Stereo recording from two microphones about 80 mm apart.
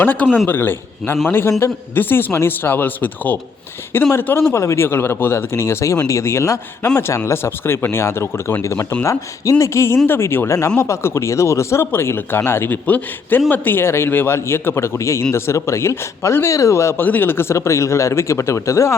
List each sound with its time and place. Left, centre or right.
0.0 s speech: left
4.5 s speech: left
17.0 s speech: left